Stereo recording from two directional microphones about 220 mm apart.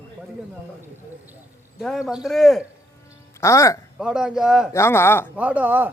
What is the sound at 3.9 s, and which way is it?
Speech, 5° right (ahead or behind).